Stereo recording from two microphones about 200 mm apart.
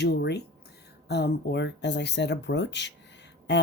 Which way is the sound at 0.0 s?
55° left (ahead or behind).